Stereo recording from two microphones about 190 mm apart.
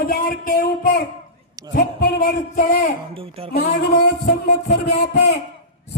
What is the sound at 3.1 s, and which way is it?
Speech, 30° right (ahead or behind).